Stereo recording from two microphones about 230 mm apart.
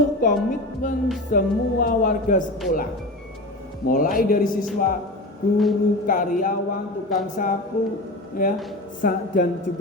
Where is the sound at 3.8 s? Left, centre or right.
Left.